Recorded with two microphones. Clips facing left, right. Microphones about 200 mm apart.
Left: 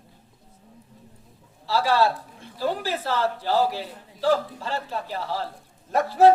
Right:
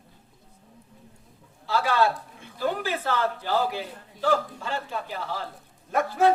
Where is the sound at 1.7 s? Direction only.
30° left (ahead or behind).